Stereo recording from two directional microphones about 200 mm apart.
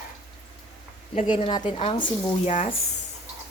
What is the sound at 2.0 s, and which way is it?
Speech, 40° left (ahead or behind).